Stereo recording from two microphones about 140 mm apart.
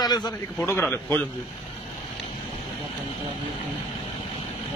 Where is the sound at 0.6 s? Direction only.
15° left (ahead or behind).